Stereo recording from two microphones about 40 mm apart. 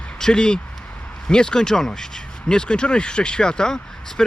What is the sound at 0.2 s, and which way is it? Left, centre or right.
Speech, centre.